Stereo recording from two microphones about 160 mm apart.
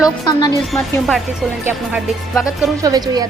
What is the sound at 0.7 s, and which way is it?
Speech, centre (ahead or behind).